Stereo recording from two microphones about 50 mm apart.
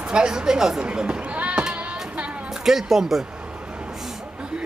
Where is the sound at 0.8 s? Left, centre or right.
Centre.